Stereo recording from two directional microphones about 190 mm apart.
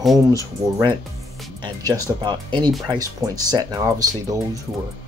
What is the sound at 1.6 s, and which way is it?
Speech, 20° right (ahead or behind).